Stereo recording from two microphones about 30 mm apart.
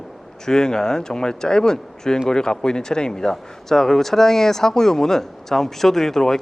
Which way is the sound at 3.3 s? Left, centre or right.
Centre.